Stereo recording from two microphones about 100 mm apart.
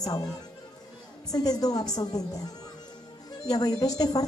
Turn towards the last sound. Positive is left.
turn(degrees=40)  # may be behind; listen again after turning